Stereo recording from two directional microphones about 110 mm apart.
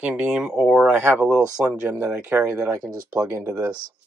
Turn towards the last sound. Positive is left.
turn(degrees=-30)  # may be behind; listen again after turning